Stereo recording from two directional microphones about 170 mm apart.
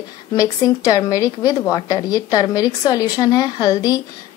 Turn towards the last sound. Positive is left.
turn(degrees=20)  # may be behind; listen again after turning